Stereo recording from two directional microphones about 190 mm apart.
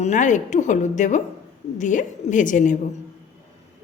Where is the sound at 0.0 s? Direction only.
40° left (ahead or behind).